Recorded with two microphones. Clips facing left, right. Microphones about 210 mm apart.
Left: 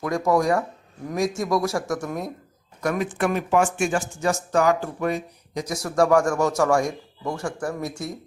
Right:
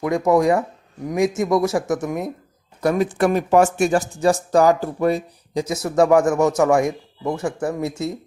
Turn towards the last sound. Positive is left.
turn(degrees=-20)  # may be behind; listen again after turning